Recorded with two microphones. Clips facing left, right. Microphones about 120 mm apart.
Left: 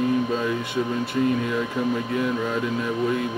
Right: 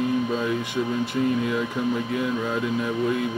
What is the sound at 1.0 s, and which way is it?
Speech, 20° right (ahead or behind).